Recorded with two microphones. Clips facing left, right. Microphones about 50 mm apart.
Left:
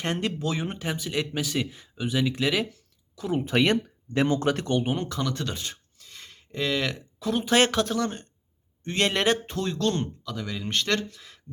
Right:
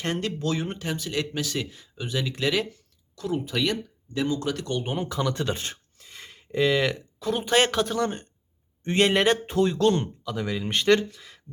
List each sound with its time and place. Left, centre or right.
0.0 s speech: centre
3.3 s speech: left
4.9 s speech: centre
5.5 s speech: right
6.0 s speech: centre